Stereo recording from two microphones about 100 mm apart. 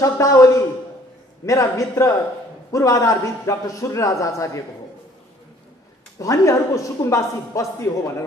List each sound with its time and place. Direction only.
0.0 s a woman's voice: 30° left (ahead or behind)
6.1 s a woman's voice: 30° left (ahead or behind)